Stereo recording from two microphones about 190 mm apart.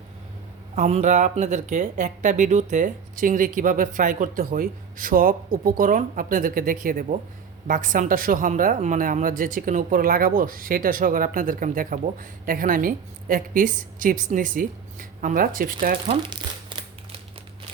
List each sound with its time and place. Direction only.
0.8 s a woman's voice: 35° right (ahead or behind)
16.0 s speech: 25° right (ahead or behind)